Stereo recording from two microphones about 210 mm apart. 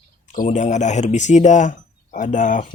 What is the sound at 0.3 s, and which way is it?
Speech, 35° left (ahead or behind).